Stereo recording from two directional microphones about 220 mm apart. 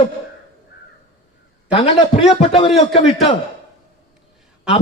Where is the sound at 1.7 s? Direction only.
25° left (ahead or behind).